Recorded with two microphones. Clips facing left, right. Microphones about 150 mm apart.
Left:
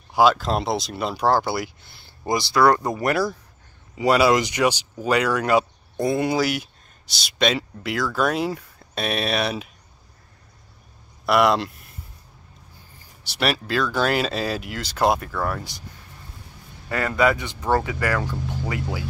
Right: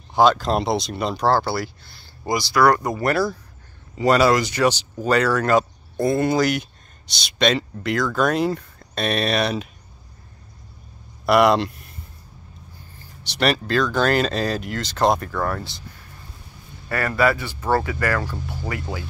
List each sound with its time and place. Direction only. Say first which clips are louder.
0.1 s speech: right 1 dB; 5° left (ahead or behind)
11.2 s speech: right 3 dB; centre (ahead or behind)
13.2 s speech: right 3 dB; 5° left (ahead or behind)
16.9 s speech: even; 15° left (ahead or behind)